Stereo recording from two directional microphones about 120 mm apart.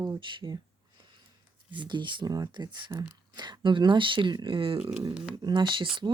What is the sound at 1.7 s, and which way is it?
Speech, 40° right (ahead or behind).